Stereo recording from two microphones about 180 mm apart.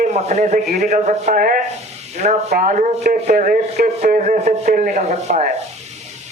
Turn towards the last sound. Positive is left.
turn(degrees=-40)  # may be behind; listen again after turning